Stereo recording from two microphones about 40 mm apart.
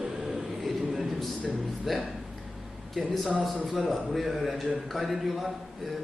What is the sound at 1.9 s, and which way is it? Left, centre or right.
A man's voice, centre.